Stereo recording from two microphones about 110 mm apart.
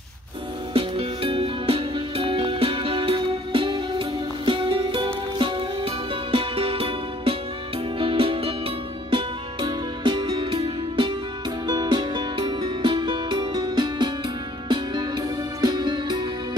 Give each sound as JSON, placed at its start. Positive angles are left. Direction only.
{"t": 0.7, "sound": "music", "side_deg": -55}